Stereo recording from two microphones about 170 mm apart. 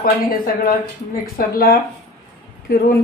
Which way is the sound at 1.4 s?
60° left (ahead or behind).